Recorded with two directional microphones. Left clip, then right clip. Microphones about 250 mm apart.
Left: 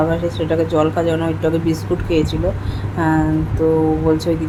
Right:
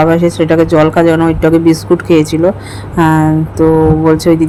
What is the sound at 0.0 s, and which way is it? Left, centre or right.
Speech, right.